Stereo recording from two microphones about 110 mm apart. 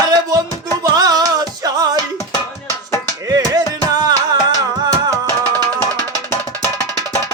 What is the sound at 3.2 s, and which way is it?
Music, 35° right (ahead or behind).